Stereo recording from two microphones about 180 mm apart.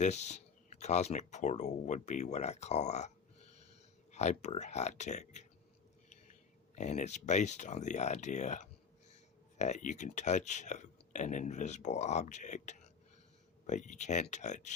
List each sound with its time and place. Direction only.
0.0 s speech: 40° left (ahead or behind)
4.1 s speech: 40° left (ahead or behind)
6.7 s speech: 40° left (ahead or behind)